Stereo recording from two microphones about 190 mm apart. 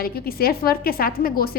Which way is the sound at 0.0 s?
50° left (ahead or behind).